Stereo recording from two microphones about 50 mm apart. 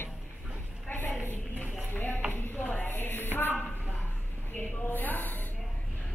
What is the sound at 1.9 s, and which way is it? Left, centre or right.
Music, left.